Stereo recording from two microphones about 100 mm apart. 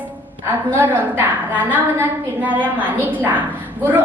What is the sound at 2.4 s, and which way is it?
A woman's voice, 15° right (ahead or behind).